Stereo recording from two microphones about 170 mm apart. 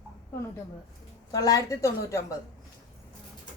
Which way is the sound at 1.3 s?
20° left (ahead or behind).